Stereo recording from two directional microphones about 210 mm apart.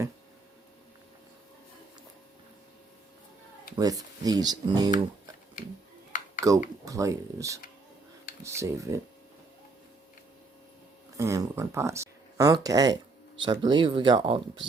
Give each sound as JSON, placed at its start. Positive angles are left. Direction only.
{"t": 3.8, "sound": "speech", "side_deg": -15}
{"t": 6.4, "sound": "speech", "side_deg": -15}
{"t": 11.2, "sound": "speech", "side_deg": -15}